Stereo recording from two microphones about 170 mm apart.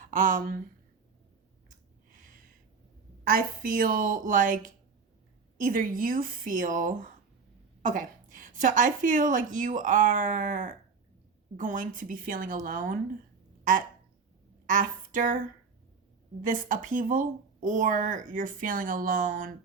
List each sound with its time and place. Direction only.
0.0 s speech: 50° right (ahead or behind)
1.7 s a sound: 50° right (ahead or behind)
3.2 s a woman's voice: 60° right (ahead or behind)
14.7 s a woman's voice: 50° right (ahead or behind)
16.4 s speech: 50° right (ahead or behind)